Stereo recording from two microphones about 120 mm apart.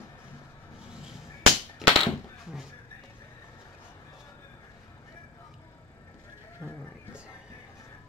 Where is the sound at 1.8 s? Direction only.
Centre (ahead or behind).